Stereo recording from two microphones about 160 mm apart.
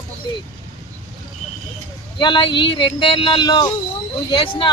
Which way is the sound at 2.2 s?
30° left (ahead or behind).